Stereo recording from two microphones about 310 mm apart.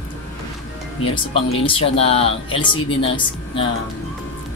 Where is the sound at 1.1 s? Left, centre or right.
Centre.